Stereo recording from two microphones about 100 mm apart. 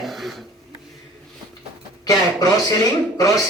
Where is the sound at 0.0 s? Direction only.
Centre (ahead or behind).